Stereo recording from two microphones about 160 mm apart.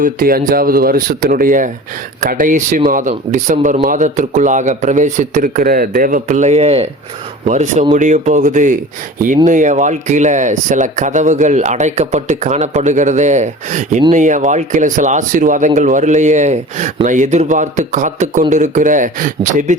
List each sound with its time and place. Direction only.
0.0 s speech: 60° right (ahead or behind)